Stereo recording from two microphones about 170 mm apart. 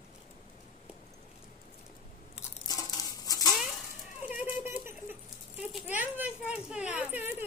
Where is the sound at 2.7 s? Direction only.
20° left (ahead or behind).